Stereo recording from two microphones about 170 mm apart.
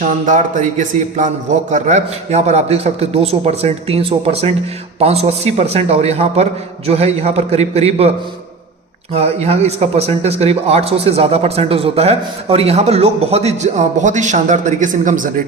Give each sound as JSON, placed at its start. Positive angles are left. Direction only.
{"t": 0.0, "sound": "a man's voice", "side_deg": -45}
{"t": 9.1, "sound": "a man's voice", "side_deg": -35}